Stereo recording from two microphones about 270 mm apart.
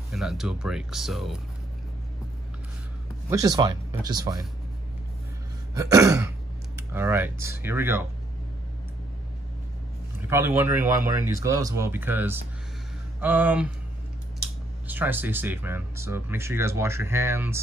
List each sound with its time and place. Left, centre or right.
0.1 s speech: centre
3.3 s speech: centre
5.8 s speech: centre
10.3 s speech: centre
14.9 s speech: centre